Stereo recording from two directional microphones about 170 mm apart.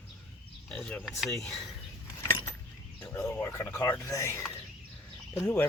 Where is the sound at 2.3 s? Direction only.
15° left (ahead or behind).